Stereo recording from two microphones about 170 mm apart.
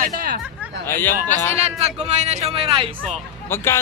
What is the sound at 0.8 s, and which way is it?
Speech, 10° left (ahead or behind).